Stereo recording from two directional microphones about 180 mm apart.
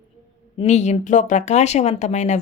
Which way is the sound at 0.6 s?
40° left (ahead or behind).